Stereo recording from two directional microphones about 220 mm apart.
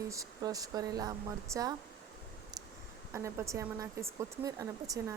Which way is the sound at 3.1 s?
15° right (ahead or behind).